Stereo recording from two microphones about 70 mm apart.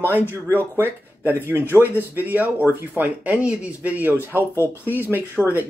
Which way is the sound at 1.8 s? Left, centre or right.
Left.